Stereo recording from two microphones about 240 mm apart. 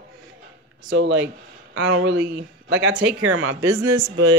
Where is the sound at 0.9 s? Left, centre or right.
Right.